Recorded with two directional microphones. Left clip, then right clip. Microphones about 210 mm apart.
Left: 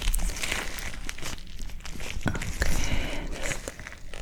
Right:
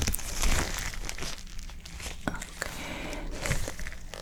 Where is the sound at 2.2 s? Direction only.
15° left (ahead or behind).